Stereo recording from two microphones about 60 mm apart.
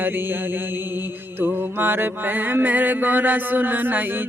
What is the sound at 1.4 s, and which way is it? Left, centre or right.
Mantra, right.